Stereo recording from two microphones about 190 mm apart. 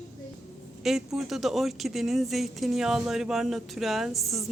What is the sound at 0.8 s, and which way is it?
Speech, centre (ahead or behind).